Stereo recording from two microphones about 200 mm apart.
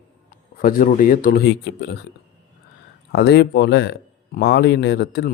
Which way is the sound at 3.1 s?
55° left (ahead or behind).